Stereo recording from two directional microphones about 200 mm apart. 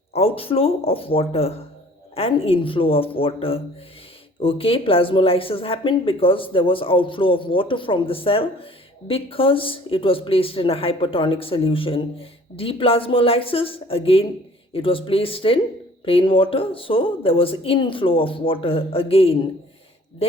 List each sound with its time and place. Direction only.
0.1 s speech: 30° left (ahead or behind)